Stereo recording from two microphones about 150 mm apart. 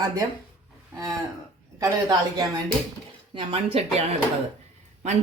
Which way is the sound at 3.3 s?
40° right (ahead or behind).